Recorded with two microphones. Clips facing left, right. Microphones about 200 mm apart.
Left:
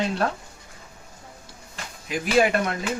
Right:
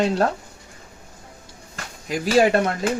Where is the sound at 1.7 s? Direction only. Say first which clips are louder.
Right 3 dB; 45° right (ahead or behind).